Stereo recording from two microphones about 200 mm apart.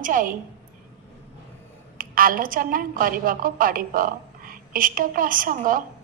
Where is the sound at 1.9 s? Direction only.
45° right (ahead or behind).